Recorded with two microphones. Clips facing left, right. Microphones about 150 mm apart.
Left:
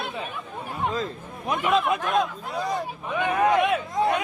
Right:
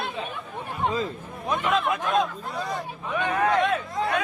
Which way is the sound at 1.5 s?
15° left (ahead or behind).